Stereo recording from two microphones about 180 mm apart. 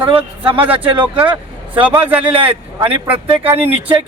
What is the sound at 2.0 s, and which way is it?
Speech, 10° right (ahead or behind).